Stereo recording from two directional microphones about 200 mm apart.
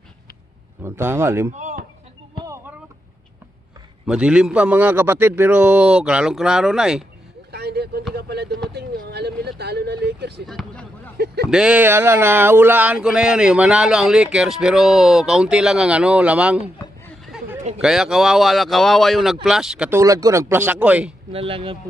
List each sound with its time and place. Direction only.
0.8 s speech: 10° right (ahead or behind)
1.6 s a sound: 35° right (ahead or behind)
2.4 s vehicle: 15° right (ahead or behind)
4.0 s speech: 5° right (ahead or behind)
7.5 s a sound: 55° right (ahead or behind)
8.7 s vehicle: 55° right (ahead or behind)
10.4 s basketball bounce: centre (ahead or behind)
11.5 s speech: 5° right (ahead or behind)
17.7 s speech: 5° right (ahead or behind)
20.0 s speech: 15° right (ahead or behind)
21.3 s speech: 30° right (ahead or behind)